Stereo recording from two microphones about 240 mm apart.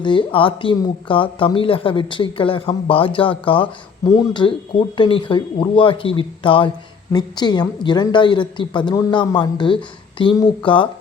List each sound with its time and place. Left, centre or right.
0.0 s a woman's voice: left